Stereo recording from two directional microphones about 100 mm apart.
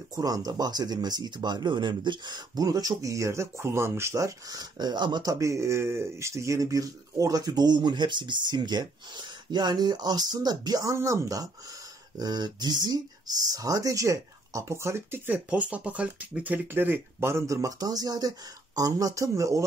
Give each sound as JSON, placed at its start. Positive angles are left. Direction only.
{"t": 0.1, "sound": "speech", "side_deg": -40}
{"t": 5.3, "sound": "speech", "side_deg": -30}
{"t": 12.2, "sound": "speech", "side_deg": -45}